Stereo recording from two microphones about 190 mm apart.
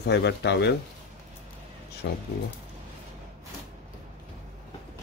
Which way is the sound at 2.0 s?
60° left (ahead or behind).